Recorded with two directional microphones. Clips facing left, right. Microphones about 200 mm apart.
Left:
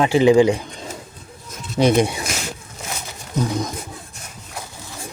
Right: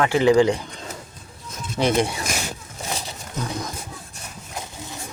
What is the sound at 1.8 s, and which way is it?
Speech, 15° left (ahead or behind).